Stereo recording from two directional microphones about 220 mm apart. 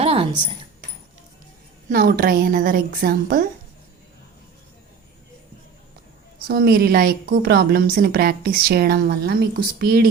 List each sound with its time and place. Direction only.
0.0 s keys jangling: 25° right (ahead or behind)
1.9 s a woman's voice: 40° right (ahead or behind)
6.5 s a woman's voice: 45° right (ahead or behind)